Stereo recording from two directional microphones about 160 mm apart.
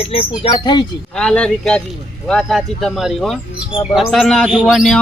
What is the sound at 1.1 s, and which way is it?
Bird, 5° left (ahead or behind).